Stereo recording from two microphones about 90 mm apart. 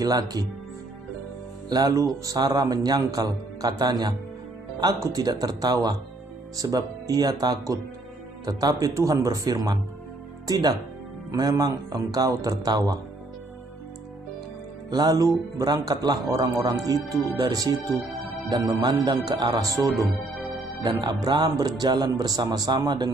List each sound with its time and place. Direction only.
0.0 s a man's voice: 45° right (ahead or behind)
1.7 s a man's voice: 45° right (ahead or behind)
14.9 s a man's voice: 50° right (ahead or behind)
21.0 s a man's voice: 55° right (ahead or behind)